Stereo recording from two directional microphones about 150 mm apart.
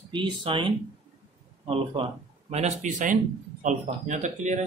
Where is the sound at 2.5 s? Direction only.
55° right (ahead or behind).